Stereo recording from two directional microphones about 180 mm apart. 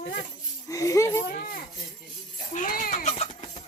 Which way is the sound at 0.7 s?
20° left (ahead or behind).